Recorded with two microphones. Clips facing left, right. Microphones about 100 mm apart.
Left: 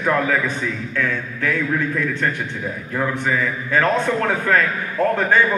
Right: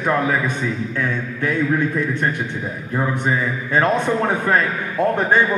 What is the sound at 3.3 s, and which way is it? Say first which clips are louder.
Speech: even; 20° right (ahead or behind).